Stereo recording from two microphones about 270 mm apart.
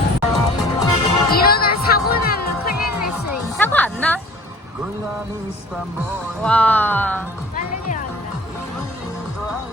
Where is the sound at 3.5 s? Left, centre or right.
Centre.